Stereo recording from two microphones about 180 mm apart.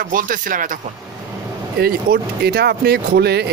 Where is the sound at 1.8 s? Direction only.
60° right (ahead or behind).